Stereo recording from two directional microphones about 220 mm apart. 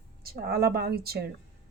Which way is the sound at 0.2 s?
45° right (ahead or behind).